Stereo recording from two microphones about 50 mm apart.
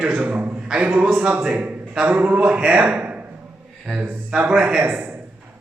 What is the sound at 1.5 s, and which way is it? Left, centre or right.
A man's voice, right.